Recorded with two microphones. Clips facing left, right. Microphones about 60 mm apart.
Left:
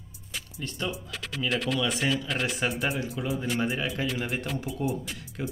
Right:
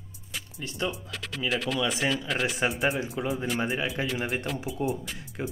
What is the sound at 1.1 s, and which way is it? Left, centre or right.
Speech, centre.